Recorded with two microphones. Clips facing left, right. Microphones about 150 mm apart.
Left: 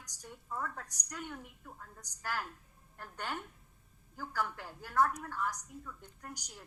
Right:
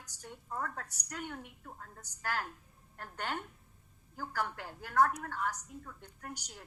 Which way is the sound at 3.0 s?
45° right (ahead or behind).